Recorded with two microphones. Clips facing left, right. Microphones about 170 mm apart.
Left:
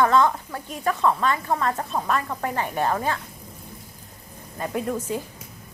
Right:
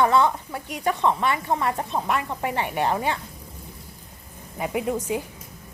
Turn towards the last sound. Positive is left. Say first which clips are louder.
# right 1 dB
turn(degrees=-15)  # may be behind; listen again after turning